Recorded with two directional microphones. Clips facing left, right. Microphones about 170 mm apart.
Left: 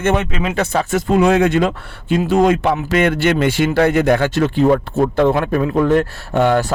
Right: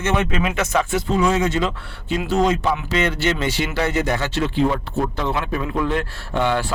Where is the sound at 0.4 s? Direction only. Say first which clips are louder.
Left 2 dB; 30° left (ahead or behind).